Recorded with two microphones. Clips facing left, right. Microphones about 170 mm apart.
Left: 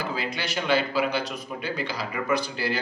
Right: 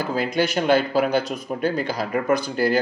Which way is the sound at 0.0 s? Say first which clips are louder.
Right 8 dB; 45° right (ahead or behind).